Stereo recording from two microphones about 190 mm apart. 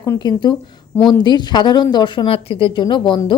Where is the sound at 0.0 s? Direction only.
20° left (ahead or behind).